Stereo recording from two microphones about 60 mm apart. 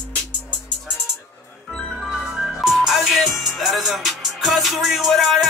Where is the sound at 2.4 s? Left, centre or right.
Centre.